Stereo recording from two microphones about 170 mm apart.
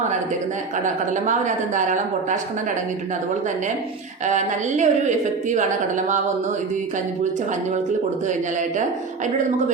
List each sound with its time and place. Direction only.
0.9 s a woman's voice: 45° right (ahead or behind)
4.3 s a woman's voice: 45° right (ahead or behind)